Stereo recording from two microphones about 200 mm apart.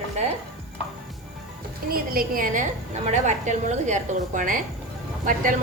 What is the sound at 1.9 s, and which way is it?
A woman's voice, 45° right (ahead or behind).